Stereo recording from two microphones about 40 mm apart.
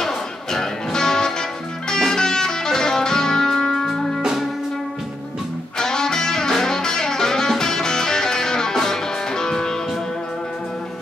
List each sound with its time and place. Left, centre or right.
0.0 s music: centre
4.2 s music: centre
5.8 s music: centre